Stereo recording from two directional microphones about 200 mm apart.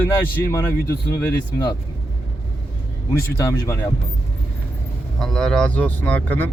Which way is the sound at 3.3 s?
15° left (ahead or behind).